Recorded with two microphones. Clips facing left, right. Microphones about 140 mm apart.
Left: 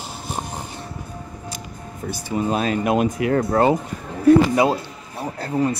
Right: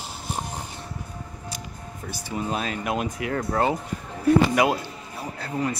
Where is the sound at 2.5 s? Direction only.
35° left (ahead or behind).